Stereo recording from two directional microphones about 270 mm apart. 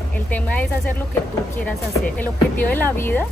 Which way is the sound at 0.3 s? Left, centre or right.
Centre.